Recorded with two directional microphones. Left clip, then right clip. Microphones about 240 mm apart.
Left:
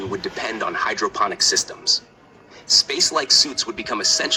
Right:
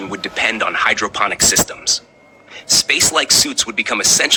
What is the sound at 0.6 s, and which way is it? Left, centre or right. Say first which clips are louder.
Speech: right 3 dB; right.